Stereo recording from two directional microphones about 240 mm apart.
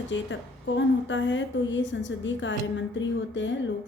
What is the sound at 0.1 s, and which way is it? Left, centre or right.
A woman's voice, left.